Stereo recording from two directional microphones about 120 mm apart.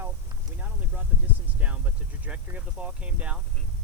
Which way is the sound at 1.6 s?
10° right (ahead or behind).